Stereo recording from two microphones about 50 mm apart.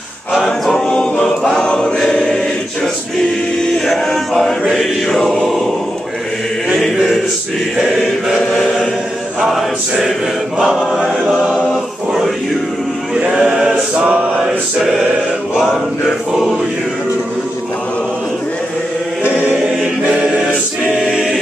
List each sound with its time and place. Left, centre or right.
0.3 s choir: centre
3.8 s chant: centre
6.8 s a sound: centre
9.5 s chant: centre
10.6 s choir: centre
13.1 s choir: centre
19.2 s choir: right